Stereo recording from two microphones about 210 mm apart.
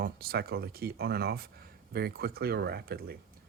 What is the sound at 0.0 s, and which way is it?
Speech, 45° right (ahead or behind).